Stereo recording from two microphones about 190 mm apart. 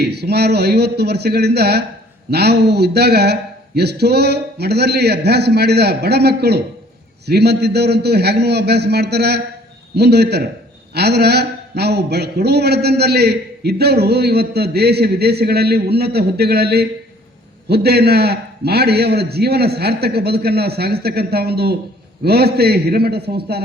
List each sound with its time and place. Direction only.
0.0 s a man's voice: 60° right (ahead or behind)